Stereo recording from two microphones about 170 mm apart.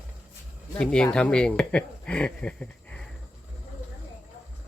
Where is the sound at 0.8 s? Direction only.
5° left (ahead or behind).